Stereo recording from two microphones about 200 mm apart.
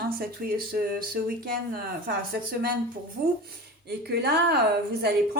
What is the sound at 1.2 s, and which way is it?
Speech, 45° right (ahead or behind).